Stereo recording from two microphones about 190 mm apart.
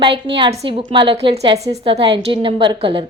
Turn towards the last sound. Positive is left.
turn(degrees=-30)  # may be behind; listen again after turning